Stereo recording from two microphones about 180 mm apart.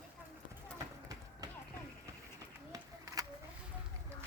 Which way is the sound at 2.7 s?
20° right (ahead or behind).